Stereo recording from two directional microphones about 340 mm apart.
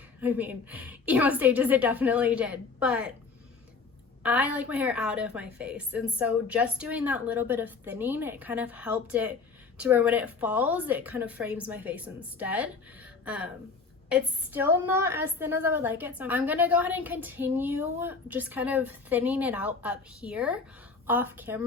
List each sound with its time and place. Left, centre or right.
0.2 s a woman's voice: centre
4.2 s a woman's voice: centre